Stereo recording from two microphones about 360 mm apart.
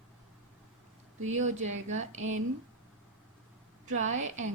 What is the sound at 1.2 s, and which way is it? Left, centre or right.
Speech, right.